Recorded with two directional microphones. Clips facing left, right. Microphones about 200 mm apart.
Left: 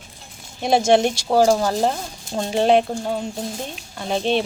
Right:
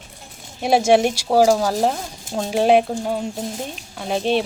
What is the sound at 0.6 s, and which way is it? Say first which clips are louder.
Speech: right 1 dB; 5° right (ahead or behind).